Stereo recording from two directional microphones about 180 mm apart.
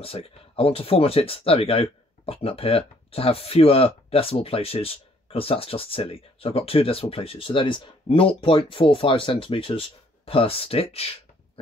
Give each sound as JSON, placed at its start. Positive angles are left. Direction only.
{"t": 0.0, "sound": "speech", "side_deg": 30}